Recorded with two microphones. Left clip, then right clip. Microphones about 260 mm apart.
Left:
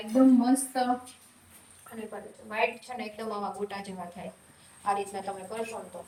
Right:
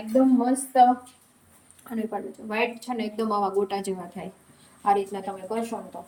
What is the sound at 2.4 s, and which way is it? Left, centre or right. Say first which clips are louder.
A woman's voice: right 2 dB; right.